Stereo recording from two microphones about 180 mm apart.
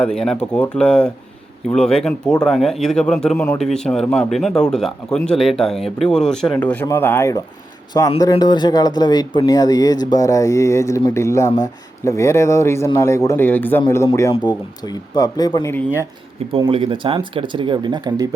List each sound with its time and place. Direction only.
0.0 s speech: 5° left (ahead or behind); by 15.7 s 20° left (ahead or behind)
16.5 s speech: 30° right (ahead or behind)